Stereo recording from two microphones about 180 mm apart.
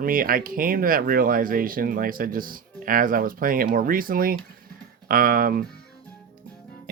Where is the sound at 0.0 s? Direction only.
50° right (ahead or behind).